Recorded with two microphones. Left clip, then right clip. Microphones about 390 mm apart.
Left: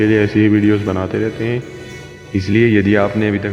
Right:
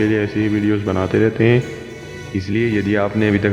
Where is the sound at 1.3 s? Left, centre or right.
Right.